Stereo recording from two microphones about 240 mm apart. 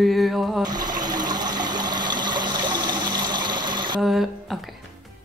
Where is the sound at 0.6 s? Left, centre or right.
Centre.